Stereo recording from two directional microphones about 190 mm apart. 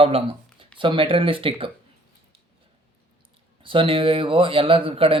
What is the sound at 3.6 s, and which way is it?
Speech, 30° right (ahead or behind).